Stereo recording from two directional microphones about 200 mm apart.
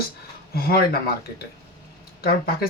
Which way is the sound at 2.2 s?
45° left (ahead or behind).